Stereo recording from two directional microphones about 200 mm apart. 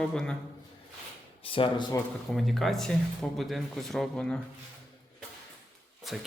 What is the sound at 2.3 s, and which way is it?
Speech, centre (ahead or behind).